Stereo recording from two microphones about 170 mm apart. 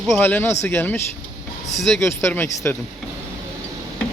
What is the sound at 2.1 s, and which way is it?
Speech, 15° left (ahead or behind).